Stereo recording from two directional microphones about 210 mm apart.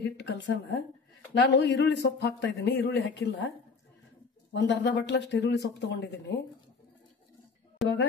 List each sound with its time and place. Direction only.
0.0 s speech: 55° left (ahead or behind)